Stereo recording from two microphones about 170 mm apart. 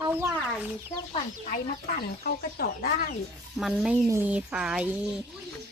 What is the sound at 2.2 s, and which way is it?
Speech, 65° left (ahead or behind).